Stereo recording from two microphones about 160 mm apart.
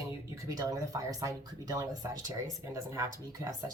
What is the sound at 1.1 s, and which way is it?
Speech, 20° right (ahead or behind).